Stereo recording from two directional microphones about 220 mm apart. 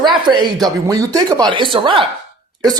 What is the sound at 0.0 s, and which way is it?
A man's voice, 20° right (ahead or behind).